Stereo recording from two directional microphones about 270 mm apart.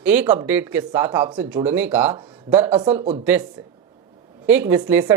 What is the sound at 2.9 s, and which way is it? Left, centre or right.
Speech, right.